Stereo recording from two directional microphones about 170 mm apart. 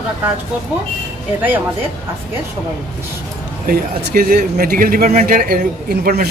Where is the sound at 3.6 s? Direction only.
65° right (ahead or behind).